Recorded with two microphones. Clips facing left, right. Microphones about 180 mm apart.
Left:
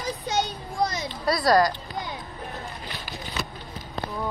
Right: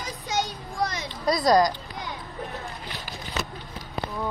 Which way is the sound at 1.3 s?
20° right (ahead or behind).